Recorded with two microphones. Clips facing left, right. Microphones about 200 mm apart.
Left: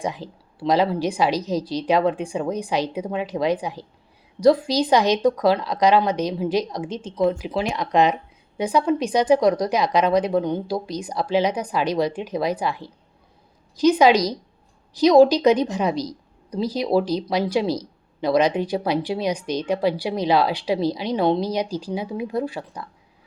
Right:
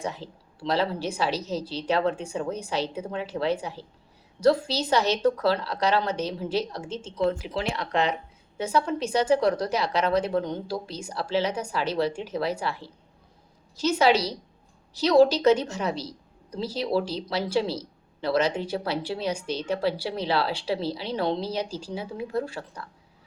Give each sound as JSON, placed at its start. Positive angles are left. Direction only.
{"t": 0.0, "sound": "speech", "side_deg": 15}